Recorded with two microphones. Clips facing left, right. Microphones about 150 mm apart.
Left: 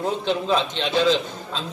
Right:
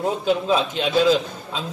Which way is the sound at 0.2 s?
5° right (ahead or behind).